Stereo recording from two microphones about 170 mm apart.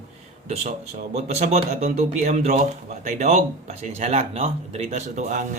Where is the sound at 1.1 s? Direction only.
40° right (ahead or behind).